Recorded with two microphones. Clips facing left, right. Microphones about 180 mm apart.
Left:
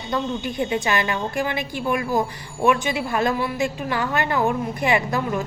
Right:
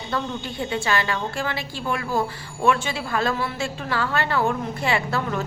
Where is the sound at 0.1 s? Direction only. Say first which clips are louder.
Left 4 dB; 15° left (ahead or behind).